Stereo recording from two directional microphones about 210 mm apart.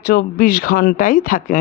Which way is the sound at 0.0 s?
50° left (ahead or behind).